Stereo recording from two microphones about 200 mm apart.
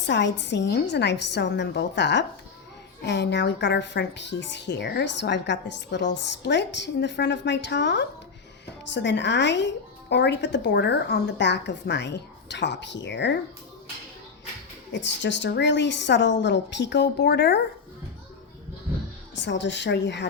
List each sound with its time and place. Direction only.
0.0 s a woman's voice: 60° left (ahead or behind)
14.9 s a woman's voice: 60° left (ahead or behind)
19.4 s a woman's voice: 60° left (ahead or behind)